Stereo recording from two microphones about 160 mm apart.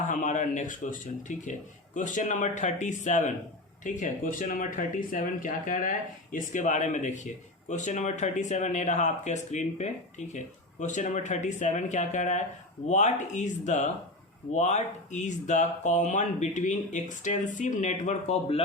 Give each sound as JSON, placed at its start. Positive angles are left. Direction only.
{"t": 0.1, "sound": "speech", "side_deg": 50}